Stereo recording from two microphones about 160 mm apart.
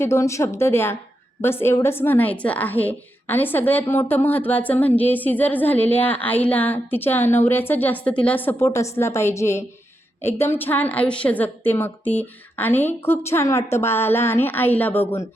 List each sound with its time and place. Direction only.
0.0 s a woman's voice: 20° left (ahead or behind)